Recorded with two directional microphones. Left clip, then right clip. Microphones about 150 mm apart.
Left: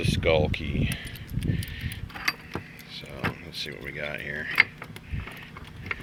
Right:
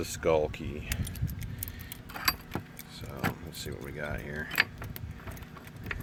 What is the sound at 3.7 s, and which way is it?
Speech, 5° right (ahead or behind).